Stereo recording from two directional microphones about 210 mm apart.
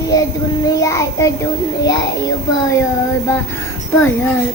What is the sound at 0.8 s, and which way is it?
Child singing, 15° left (ahead or behind).